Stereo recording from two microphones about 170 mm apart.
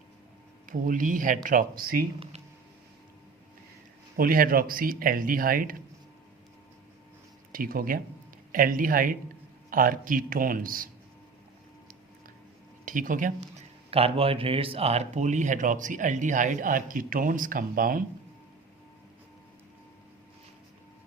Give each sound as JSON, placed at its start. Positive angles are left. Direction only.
{"t": 0.7, "sound": "speech", "side_deg": -50}
{"t": 2.1, "sound": "speech", "side_deg": -35}
{"t": 4.2, "sound": "speech", "side_deg": -55}
{"t": 7.5, "sound": "speech", "side_deg": -60}
{"t": 12.8, "sound": "speech", "side_deg": -50}
{"t": 13.9, "sound": "speech", "side_deg": -35}